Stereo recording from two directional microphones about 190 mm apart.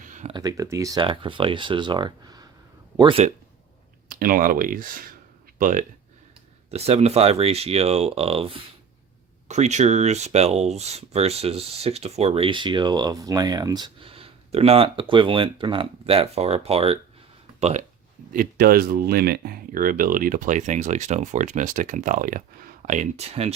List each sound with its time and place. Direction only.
0.0 s a sound: 40° right (ahead or behind)
0.3 s speech: 20° right (ahead or behind)
4.1 s speech: 50° right (ahead or behind)
6.7 s speech: 35° right (ahead or behind)
18.3 s speech: 50° right (ahead or behind); by 23.5 s 35° right (ahead or behind)